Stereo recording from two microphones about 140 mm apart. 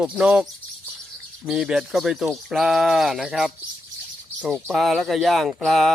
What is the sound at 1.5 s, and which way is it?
Speech, 5° right (ahead or behind).